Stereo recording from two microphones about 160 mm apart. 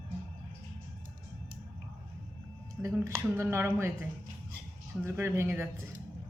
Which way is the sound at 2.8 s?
20° right (ahead or behind).